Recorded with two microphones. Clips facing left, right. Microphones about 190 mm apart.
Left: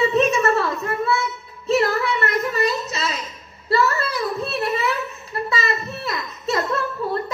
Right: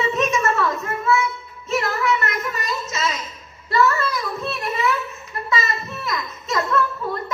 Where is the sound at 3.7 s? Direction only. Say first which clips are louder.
Right 1 dB; 30° left (ahead or behind).